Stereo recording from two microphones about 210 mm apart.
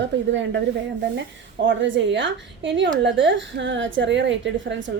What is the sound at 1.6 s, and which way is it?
A woman's voice, 60° right (ahead or behind).